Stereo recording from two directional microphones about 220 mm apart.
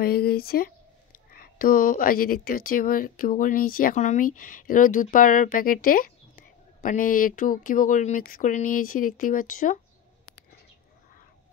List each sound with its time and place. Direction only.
0.0 s speech: 45° left (ahead or behind)